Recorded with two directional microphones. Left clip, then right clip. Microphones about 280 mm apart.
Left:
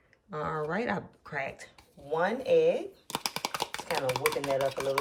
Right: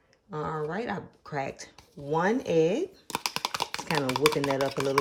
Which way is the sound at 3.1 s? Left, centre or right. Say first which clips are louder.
Even; centre.